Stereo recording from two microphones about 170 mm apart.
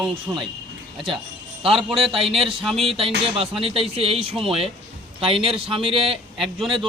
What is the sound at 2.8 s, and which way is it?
A man's voice, 35° right (ahead or behind).